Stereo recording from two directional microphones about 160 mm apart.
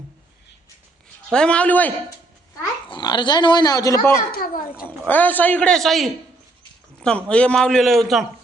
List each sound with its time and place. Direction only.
1.3 s a man's voice: 5° left (ahead or behind)
2.9 s speech: 25° left (ahead or behind)
4.3 s a child's voice: 65° left (ahead or behind)
5.0 s a man's voice: 10° left (ahead or behind)
7.3 s a man's voice: 5° left (ahead or behind)